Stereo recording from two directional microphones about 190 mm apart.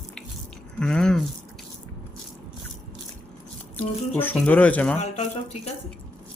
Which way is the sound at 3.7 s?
10° left (ahead or behind).